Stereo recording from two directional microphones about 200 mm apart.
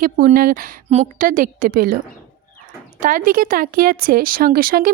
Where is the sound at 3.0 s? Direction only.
40° right (ahead or behind).